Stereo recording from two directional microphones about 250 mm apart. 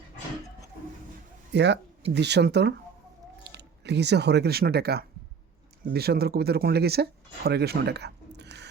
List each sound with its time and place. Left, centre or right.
1.5 s speech: right